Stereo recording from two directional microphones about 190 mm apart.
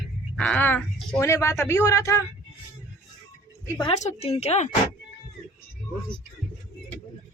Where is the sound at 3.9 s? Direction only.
35° left (ahead or behind).